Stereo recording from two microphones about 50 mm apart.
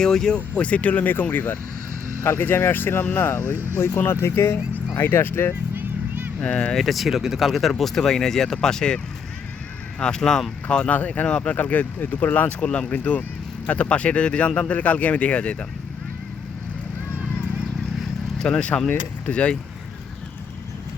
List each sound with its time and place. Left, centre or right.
0.0 s speech: centre
0.3 s speech: left
5.7 s vehicle: right
6.4 s speech: centre
6.7 s speech: centre
10.0 s speech: centre
10.8 s speech: left
18.3 s speech: centre
18.9 s speech: left